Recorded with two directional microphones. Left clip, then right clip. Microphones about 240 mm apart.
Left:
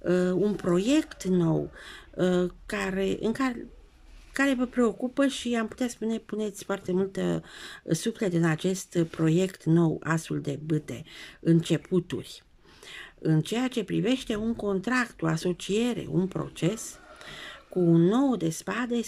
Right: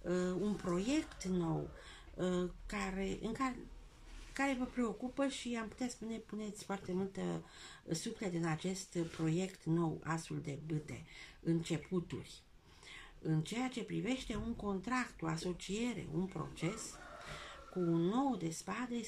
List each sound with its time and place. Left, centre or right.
0.0 s speech: left